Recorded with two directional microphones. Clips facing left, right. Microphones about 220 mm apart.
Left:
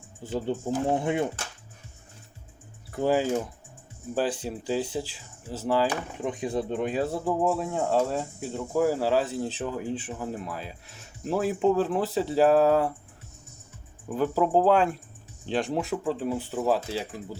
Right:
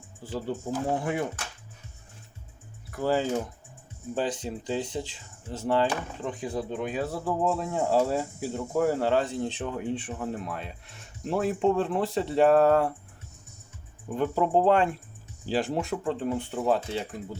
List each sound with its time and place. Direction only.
0.2 s speech: 20° left (ahead or behind)
2.9 s speech: 15° left (ahead or behind)
4.1 s speech: 5° left (ahead or behind)
5.9 s speech: 15° left (ahead or behind)
7.3 s speech: 15° left (ahead or behind)
7.5 s speech: centre (ahead or behind)
14.1 s speech: centre (ahead or behind)